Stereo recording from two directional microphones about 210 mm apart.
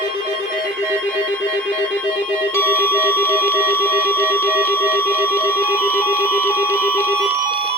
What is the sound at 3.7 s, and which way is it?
Alarm, 10° left (ahead or behind).